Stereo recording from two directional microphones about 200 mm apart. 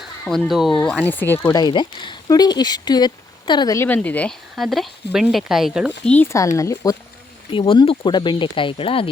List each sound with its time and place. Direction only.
0.0 s speech: centre (ahead or behind)
6.1 s speech: 10° left (ahead or behind); by 9.0 s 25° left (ahead or behind)